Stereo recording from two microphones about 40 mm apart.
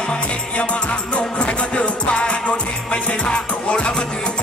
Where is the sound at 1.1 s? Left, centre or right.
Left.